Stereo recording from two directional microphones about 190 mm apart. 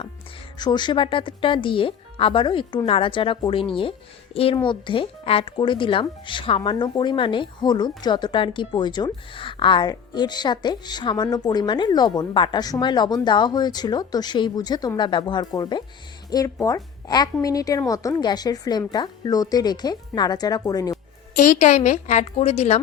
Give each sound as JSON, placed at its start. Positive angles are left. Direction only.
{"t": 0.6, "sound": "speech", "side_deg": 25}
{"t": 21.3, "sound": "a woman's voice", "side_deg": 40}